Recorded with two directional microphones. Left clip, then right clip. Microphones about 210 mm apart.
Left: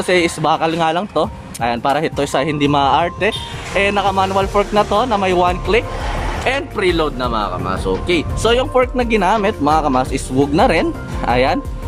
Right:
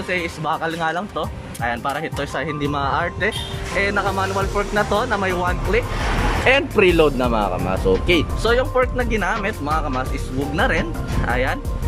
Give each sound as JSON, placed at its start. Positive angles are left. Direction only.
{"t": 0.1, "sound": "speech", "side_deg": 20}
{"t": 6.4, "sound": "speech", "side_deg": 0}
{"t": 8.4, "sound": "speech", "side_deg": 15}